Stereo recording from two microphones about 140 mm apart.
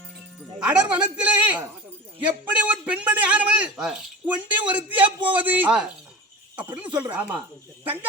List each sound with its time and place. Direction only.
0.6 s a man's voice: 5° right (ahead or behind)
4.9 s a man's voice: 35° right (ahead or behind)
5.3 s a man's voice: 10° right (ahead or behind)